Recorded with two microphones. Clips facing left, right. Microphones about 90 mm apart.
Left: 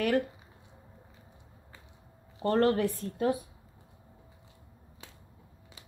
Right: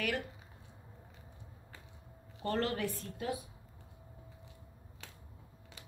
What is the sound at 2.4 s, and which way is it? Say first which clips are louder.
Speech: left 9 dB; 35° left (ahead or behind).